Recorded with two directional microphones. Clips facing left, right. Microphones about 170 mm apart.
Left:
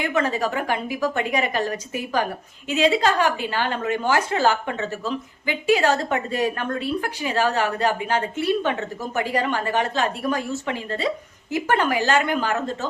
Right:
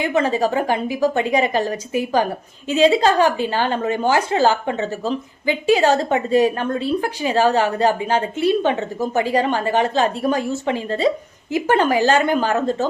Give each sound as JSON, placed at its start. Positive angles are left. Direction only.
{"t": 0.0, "sound": "a woman's voice", "side_deg": -25}